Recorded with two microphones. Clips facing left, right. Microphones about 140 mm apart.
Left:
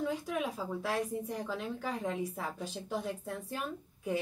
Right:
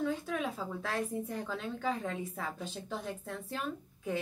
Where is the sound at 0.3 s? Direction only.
10° left (ahead or behind).